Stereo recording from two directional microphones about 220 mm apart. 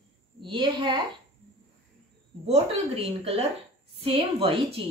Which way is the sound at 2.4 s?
25° right (ahead or behind).